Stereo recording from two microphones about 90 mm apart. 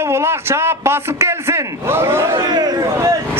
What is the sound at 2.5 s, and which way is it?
Speech, 45° right (ahead or behind).